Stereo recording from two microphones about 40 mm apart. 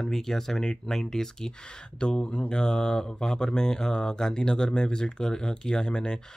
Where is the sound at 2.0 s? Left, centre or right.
Left.